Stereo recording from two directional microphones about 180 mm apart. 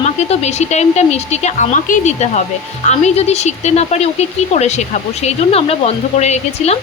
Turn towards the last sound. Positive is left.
turn(degrees=35)  # may be behind; listen again after turning